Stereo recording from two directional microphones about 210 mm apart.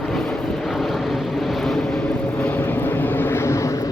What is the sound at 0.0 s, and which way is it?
Vehicle, centre (ahead or behind).